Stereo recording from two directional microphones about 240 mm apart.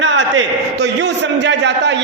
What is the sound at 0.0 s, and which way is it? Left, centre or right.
A man's voice, right.